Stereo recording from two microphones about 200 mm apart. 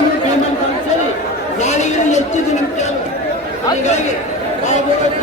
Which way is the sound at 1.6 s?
35° left (ahead or behind).